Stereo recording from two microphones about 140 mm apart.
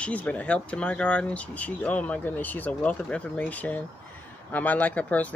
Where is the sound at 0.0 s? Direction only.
10° left (ahead or behind).